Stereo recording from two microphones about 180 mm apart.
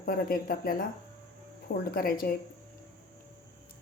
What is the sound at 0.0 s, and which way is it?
A woman's voice, 55° left (ahead or behind).